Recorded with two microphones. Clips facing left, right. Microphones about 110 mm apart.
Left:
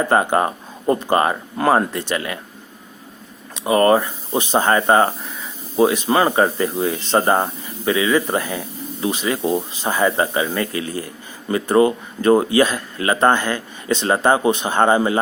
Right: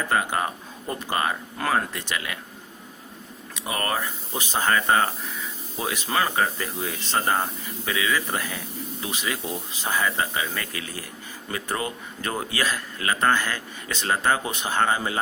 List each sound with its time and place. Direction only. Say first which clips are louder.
0.0 s speech: left 8 dB; 35° left (ahead or behind)
3.5 s speech: left 13 dB; 30° left (ahead or behind)